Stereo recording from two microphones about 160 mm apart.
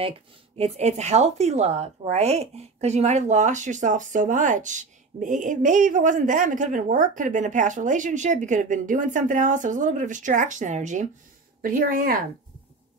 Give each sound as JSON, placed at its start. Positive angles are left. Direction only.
{"t": 0.0, "sound": "speech", "side_deg": -40}
{"t": 11.6, "sound": "speech", "side_deg": -65}